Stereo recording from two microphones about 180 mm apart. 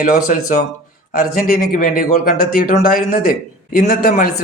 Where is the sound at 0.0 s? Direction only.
50° left (ahead or behind).